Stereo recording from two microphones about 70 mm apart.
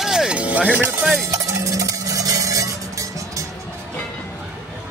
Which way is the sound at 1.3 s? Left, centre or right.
Right.